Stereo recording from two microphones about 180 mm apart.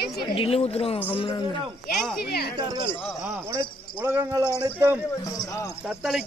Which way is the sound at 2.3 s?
60° left (ahead or behind).